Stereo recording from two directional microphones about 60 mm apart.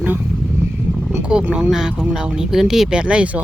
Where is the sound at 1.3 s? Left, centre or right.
Centre.